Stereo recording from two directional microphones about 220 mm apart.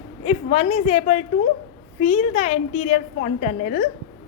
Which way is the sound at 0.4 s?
30° left (ahead or behind).